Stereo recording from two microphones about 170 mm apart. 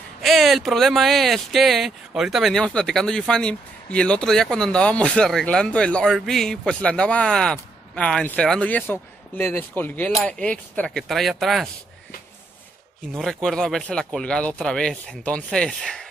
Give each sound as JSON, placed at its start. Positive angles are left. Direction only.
{"t": 0.2, "sound": "speech", "side_deg": 0}
{"t": 13.2, "sound": "speech", "side_deg": 0}